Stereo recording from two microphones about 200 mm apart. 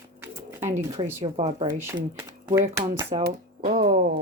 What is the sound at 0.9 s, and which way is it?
Speech, 15° right (ahead or behind).